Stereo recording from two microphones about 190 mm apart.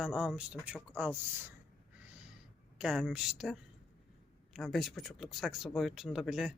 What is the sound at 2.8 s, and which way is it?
Speech, 5° right (ahead or behind).